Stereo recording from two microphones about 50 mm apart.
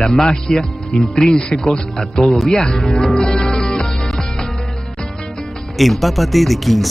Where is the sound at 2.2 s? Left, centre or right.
Centre.